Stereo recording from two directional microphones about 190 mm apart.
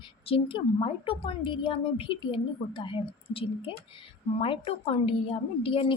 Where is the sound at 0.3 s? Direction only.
30° left (ahead or behind).